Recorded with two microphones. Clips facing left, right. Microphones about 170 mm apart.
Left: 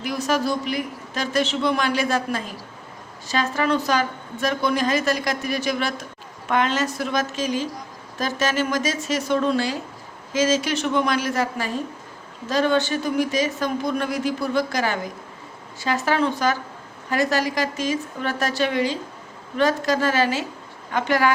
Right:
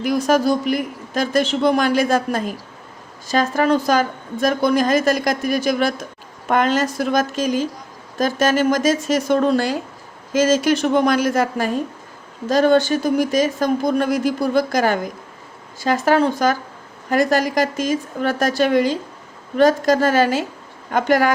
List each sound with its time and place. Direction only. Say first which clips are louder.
0.0 s a woman's voice: right 6 dB; 45° right (ahead or behind)